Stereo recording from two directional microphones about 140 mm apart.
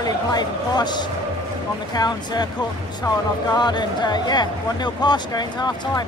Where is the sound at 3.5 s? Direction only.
30° left (ahead or behind).